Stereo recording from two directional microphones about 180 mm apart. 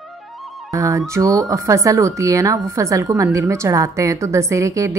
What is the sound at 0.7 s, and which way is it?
A woman's voice, 15° right (ahead or behind).